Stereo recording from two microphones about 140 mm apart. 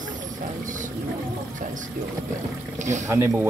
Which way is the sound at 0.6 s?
65° right (ahead or behind).